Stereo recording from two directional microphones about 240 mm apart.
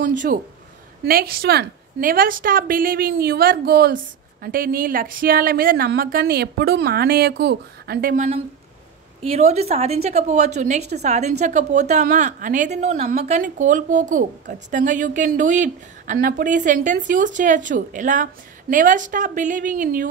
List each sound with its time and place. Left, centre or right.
1.0 s a woman's voice: right